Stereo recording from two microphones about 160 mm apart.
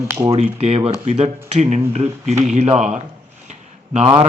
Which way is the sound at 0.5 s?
40° right (ahead or behind).